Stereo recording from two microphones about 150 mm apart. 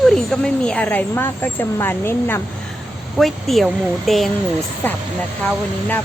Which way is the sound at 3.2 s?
Centre (ahead or behind).